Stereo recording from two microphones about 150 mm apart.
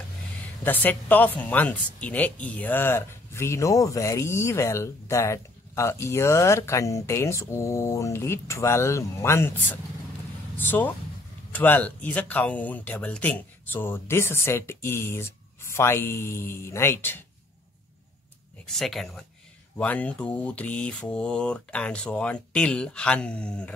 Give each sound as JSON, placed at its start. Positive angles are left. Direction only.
{"t": 0.7, "sound": "a woman's voice", "side_deg": 10}
{"t": 18.7, "sound": "a woman's voice", "side_deg": 0}